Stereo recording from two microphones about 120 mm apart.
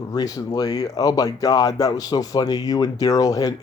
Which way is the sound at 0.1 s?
30° left (ahead or behind).